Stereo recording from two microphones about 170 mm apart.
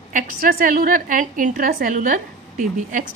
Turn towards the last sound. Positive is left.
turn(degrees=-50)  # may be behind; listen again after turning